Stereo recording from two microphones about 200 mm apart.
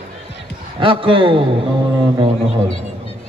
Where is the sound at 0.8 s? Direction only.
25° right (ahead or behind).